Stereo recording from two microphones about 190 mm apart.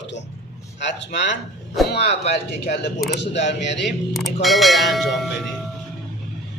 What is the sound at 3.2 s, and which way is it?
Speech, 65° left (ahead or behind).